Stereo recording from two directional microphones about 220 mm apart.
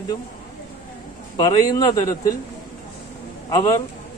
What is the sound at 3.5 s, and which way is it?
Speech, 15° left (ahead or behind).